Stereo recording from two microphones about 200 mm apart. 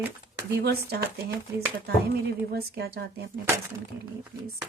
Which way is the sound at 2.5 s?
50° right (ahead or behind).